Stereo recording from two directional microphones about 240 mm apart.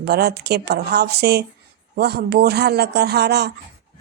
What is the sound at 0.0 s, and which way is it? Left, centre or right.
A woman's voice, right.